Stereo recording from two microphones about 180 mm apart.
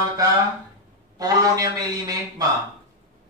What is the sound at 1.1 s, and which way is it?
A man's voice, 20° right (ahead or behind).